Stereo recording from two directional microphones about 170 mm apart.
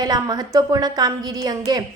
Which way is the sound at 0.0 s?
20° right (ahead or behind).